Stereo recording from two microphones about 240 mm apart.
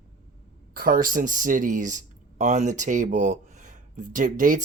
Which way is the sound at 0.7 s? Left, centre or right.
Right.